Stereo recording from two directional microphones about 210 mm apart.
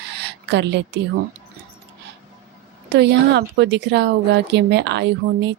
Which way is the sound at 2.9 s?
55° right (ahead or behind).